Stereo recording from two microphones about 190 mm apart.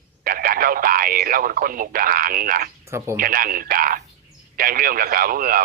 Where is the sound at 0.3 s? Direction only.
50° right (ahead or behind).